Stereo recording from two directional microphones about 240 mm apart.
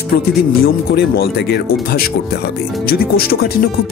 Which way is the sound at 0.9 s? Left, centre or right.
Left.